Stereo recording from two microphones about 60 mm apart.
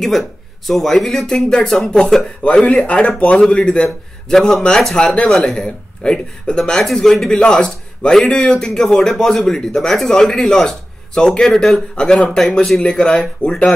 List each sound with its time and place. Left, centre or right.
0.0 s speech: centre
2.9 s speech: centre